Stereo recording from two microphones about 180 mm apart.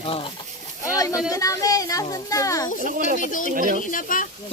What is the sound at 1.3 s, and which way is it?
A child's voice, 20° left (ahead or behind).